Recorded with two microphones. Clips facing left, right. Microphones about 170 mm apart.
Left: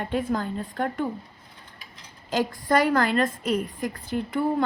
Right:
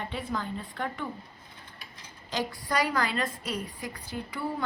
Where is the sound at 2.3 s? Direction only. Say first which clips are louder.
Left 8 dB; 50° left (ahead or behind).